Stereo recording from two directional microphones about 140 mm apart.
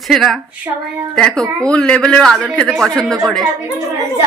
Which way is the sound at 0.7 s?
25° right (ahead or behind).